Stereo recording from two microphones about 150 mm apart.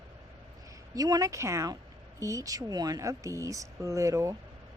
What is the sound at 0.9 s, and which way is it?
Speech, 25° right (ahead or behind).